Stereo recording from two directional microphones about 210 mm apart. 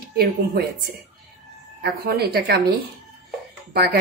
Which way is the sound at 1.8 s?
50° right (ahead or behind).